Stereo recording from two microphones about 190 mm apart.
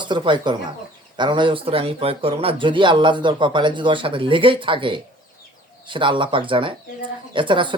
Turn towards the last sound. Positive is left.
turn(degrees=-25)  # may be behind; listen again after turning